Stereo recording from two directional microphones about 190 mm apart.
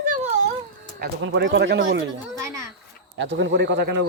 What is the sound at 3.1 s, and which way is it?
Speech, 70° right (ahead or behind).